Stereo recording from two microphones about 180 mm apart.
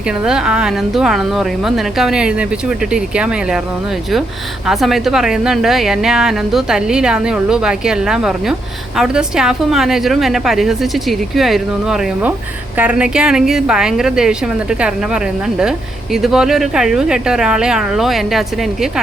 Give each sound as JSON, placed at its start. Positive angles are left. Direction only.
{"t": 0.3, "sound": "a woman's voice", "side_deg": -5}
{"t": 4.6, "sound": "a woman's voice", "side_deg": 0}